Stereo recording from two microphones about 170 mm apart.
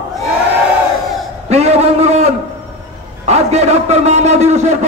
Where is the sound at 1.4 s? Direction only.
40° right (ahead or behind).